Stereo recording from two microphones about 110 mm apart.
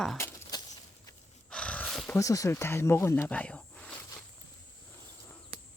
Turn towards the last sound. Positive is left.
turn(degrees=5)  # may be behind; listen again after turning